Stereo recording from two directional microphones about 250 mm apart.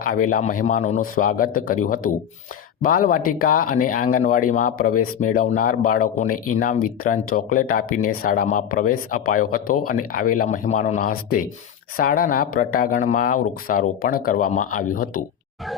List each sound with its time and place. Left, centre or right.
0.0 s speech: left